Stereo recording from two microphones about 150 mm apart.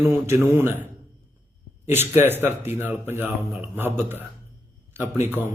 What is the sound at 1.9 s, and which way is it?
A man's voice, 15° right (ahead or behind).